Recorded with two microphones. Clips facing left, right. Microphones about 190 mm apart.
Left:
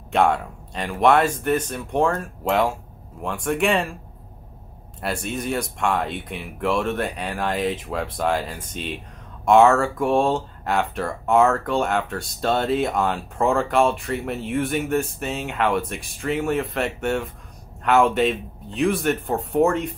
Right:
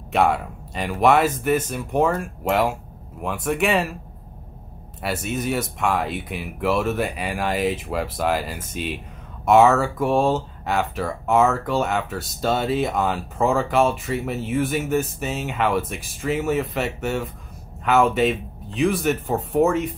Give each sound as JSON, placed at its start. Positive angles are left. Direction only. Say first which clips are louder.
{"t": 0.1, "sound": "speech", "louder": "even", "side_deg": -5}
{"t": 5.0, "sound": "speech", "louder": "right 1 dB", "side_deg": -5}